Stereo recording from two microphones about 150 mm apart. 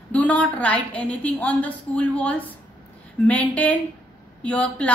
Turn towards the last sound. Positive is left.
turn(degrees=10)  # may be behind; listen again after turning